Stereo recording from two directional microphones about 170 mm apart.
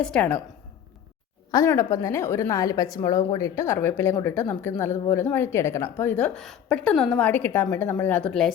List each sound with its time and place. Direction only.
0.0 s a woman's voice: 5° left (ahead or behind)
1.5 s a woman's voice: 20° left (ahead or behind); by 8.5 s centre (ahead or behind)